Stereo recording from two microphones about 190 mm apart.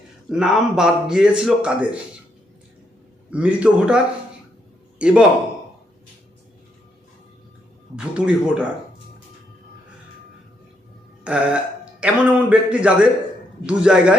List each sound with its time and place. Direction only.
0.3 s a man's voice: 5° right (ahead or behind)
3.2 s a man's voice: 5° right (ahead or behind)
7.9 s a man's voice: 5° right (ahead or behind)
11.2 s a man's voice: 5° right (ahead or behind)